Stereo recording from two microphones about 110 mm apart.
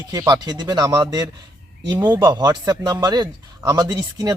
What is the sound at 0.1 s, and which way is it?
Speech, 35° right (ahead or behind).